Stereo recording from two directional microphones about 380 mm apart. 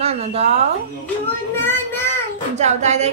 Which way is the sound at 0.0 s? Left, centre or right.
Centre.